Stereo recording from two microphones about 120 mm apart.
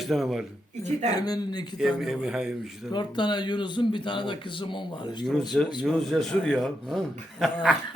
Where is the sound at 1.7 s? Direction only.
Centre (ahead or behind).